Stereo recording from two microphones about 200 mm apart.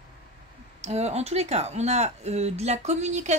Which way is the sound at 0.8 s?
35° right (ahead or behind).